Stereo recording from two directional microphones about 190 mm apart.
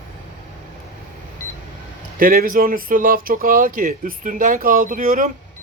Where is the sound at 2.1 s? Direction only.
50° right (ahead or behind).